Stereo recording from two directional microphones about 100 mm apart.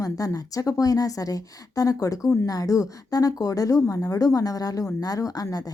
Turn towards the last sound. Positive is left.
turn(degrees=40)  # may be behind; listen again after turning